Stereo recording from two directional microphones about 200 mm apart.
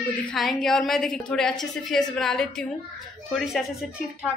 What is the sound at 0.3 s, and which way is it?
A woman's voice, centre (ahead or behind).